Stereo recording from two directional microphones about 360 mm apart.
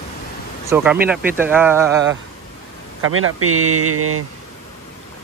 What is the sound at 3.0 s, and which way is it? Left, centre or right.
Speech, right.